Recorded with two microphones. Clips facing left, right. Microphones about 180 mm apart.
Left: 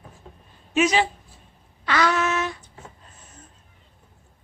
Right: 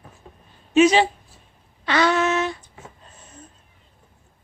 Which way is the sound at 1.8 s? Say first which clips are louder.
Right 3 dB; 25° right (ahead or behind).